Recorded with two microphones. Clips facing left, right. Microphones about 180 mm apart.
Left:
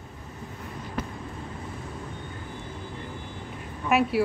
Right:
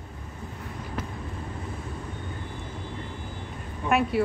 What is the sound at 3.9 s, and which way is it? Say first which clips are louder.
Speech: left 1 dB; 5° left (ahead or behind).